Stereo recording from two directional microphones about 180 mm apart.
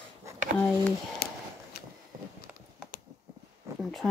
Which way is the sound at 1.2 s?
60° left (ahead or behind).